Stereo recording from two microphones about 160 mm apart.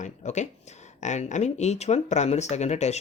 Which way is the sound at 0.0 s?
50° left (ahead or behind).